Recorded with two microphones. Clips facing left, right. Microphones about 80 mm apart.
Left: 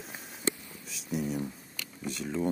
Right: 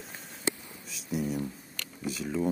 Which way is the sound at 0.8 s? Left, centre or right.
Centre.